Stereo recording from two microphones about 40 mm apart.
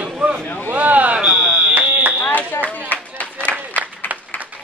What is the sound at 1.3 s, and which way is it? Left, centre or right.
Fire alarm, centre.